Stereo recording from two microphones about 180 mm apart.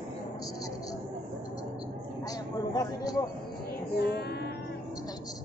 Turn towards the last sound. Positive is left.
turn(degrees=65)  # may be behind; listen again after turning